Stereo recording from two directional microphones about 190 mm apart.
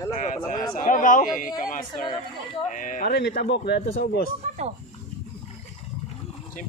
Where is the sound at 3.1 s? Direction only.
60° left (ahead or behind).